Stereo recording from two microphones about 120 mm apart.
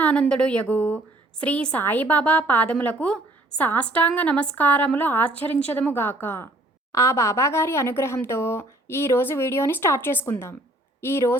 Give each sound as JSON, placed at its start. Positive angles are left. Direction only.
{"t": 0.0, "sound": "a woman's voice", "side_deg": 10}